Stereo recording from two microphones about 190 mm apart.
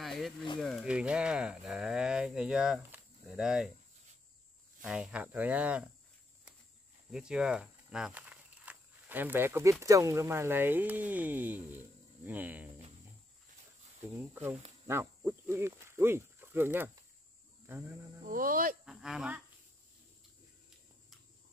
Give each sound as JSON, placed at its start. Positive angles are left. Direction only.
{"t": 0.0, "sound": "a sound", "side_deg": 0}
{"t": 0.6, "sound": "speech", "side_deg": 5}
{"t": 4.8, "sound": "speech", "side_deg": -5}
{"t": 7.1, "sound": "speech", "side_deg": -5}
{"t": 14.9, "sound": "speech", "side_deg": -10}
{"t": 18.2, "sound": "speech", "side_deg": -45}
{"t": 18.9, "sound": "speech", "side_deg": 0}